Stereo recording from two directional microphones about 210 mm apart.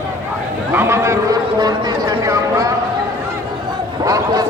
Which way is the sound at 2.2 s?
15° right (ahead or behind).